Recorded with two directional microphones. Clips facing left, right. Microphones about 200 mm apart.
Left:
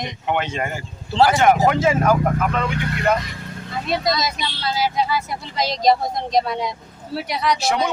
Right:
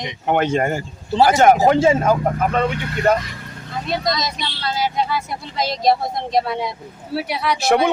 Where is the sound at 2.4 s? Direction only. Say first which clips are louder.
Right 3 dB; 40° right (ahead or behind).